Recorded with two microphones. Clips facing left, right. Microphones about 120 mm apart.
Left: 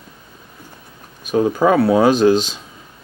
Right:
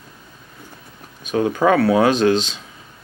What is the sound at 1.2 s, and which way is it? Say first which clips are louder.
Speech: left 2 dB; 5° left (ahead or behind).